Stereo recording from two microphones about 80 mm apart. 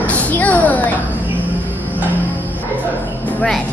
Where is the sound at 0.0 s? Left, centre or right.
Centre.